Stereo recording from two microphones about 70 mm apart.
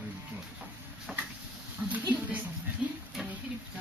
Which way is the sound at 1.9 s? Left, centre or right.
Centre.